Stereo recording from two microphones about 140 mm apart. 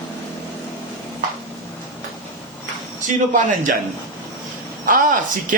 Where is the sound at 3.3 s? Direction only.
65° right (ahead or behind).